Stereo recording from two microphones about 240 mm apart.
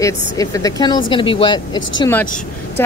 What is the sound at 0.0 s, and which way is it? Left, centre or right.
Speech, centre.